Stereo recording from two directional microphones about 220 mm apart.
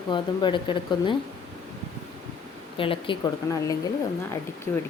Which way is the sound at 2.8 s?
25° left (ahead or behind).